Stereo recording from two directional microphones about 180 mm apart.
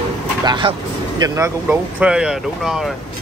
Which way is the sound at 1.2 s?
15° right (ahead or behind).